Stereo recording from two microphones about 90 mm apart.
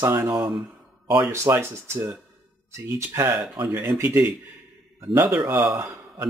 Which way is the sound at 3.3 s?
50° right (ahead or behind).